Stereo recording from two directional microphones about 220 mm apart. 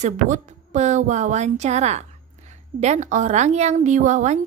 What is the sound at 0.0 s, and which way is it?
A woman's voice, 30° right (ahead or behind).